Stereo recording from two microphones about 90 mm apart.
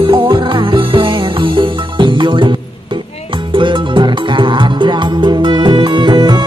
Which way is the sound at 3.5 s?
65° right (ahead or behind).